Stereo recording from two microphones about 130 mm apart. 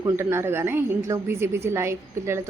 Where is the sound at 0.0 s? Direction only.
20° right (ahead or behind).